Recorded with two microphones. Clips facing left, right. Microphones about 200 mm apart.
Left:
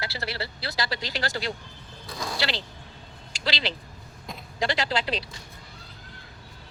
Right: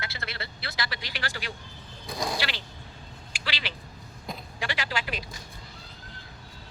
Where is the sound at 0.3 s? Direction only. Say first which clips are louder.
Left 5 dB; 30° left (ahead or behind).